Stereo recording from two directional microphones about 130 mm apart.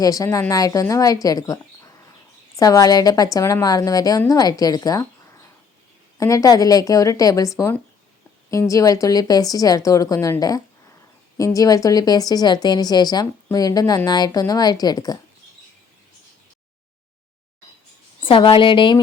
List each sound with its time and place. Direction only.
0.0 s a woman's voice: 25° left (ahead or behind)
8.7 s a woman's voice: 25° left (ahead or behind)
11.3 s a woman's voice: 25° left (ahead or behind)
18.2 s a woman's voice: 40° left (ahead or behind)